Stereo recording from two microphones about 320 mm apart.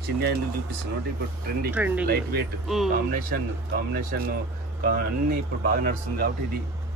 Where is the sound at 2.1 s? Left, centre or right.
Right.